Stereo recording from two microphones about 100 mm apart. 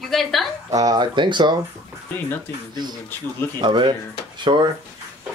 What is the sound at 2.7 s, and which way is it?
Speech, 45° right (ahead or behind).